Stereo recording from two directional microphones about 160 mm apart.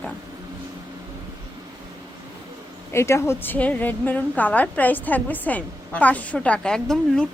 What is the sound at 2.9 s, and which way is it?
A woman's voice, 15° left (ahead or behind).